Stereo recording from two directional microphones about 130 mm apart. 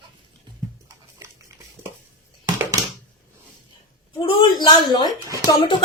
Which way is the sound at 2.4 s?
25° right (ahead or behind).